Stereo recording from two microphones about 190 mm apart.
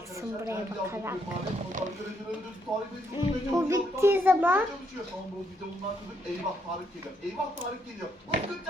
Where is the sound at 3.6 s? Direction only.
15° right (ahead or behind).